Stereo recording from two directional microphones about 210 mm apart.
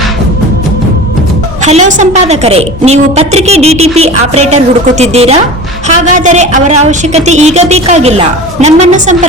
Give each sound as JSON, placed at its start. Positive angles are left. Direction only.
{"t": 1.6, "sound": "a woman's voice", "side_deg": -35}